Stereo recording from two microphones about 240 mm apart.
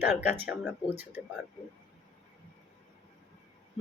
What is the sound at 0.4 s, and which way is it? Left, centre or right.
Speech, centre.